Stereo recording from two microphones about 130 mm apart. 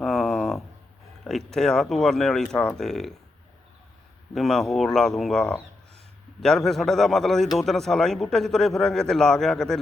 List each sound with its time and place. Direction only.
0.0 s a sound: centre (ahead or behind)
1.2 s a man's voice: 5° left (ahead or behind)
4.4 s a man's voice: centre (ahead or behind)